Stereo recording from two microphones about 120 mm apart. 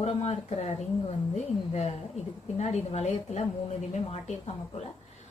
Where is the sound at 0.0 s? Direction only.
60° left (ahead or behind).